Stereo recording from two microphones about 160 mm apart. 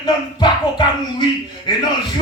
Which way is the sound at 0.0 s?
25° left (ahead or behind).